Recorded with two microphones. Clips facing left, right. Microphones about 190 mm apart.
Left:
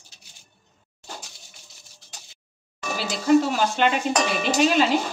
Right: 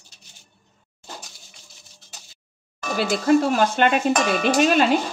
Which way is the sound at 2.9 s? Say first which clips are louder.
Right 1 dB; 55° right (ahead or behind).